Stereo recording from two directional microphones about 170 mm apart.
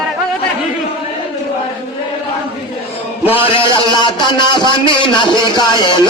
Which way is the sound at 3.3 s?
30° left (ahead or behind).